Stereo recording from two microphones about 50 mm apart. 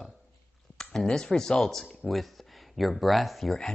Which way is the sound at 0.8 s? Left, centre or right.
Centre.